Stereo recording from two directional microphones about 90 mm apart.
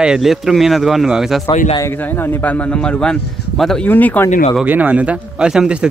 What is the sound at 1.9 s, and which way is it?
Speech, 20° left (ahead or behind).